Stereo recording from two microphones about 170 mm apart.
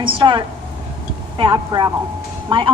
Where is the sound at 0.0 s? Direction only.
30° right (ahead or behind).